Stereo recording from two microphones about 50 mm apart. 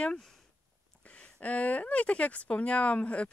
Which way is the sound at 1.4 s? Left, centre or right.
Left.